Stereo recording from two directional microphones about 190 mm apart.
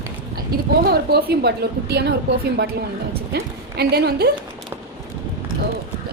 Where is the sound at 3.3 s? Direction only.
60° right (ahead or behind).